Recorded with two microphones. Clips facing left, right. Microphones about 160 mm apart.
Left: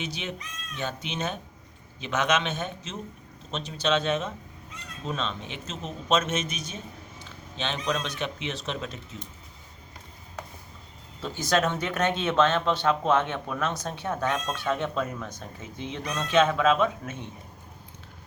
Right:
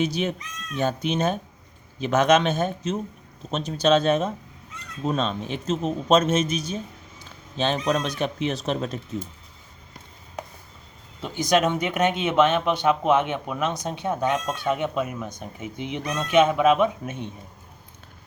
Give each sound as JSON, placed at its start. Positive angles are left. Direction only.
{"t": 0.0, "sound": "a man's voice", "side_deg": -40}
{"t": 11.2, "sound": "speech", "side_deg": -15}